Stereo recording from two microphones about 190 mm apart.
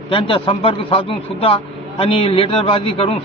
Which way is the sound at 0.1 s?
30° left (ahead or behind).